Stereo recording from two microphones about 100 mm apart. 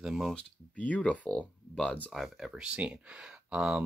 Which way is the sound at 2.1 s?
Centre (ahead or behind).